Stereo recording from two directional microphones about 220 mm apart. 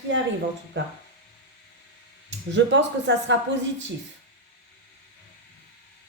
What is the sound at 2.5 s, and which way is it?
Speech, 55° right (ahead or behind).